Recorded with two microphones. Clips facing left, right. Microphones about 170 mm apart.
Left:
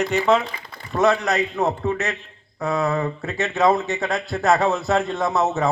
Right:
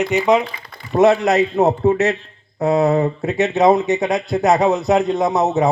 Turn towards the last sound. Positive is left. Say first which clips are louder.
# right 5 dB
turn(degrees=-20)  # may be behind; listen again after turning